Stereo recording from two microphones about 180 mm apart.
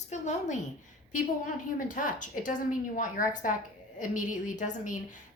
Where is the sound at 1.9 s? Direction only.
45° left (ahead or behind).